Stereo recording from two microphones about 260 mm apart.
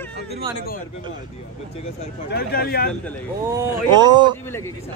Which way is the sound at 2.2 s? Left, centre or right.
Left.